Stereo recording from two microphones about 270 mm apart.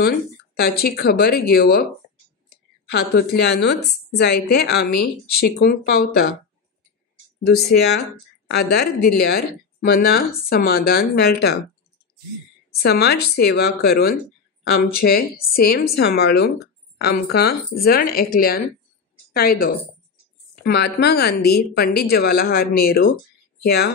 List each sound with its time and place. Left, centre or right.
0.6 s a woman's voice: left
2.9 s a woman's voice: left
7.4 s a woman's voice: left
12.7 s a woman's voice: left